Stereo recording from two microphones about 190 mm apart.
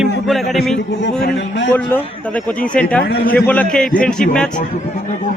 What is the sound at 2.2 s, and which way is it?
Speech, 5° left (ahead or behind).